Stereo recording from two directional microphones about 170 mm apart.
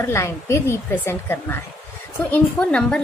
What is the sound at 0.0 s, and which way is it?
A woman's voice, 15° left (ahead or behind).